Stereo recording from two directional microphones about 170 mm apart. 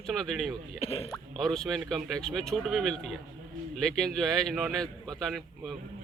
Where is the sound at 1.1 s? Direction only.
Centre (ahead or behind).